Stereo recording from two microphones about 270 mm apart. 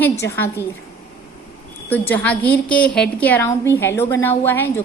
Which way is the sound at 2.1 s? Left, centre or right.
Centre.